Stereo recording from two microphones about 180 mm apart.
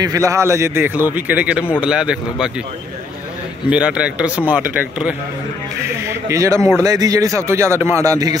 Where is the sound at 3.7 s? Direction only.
5° right (ahead or behind).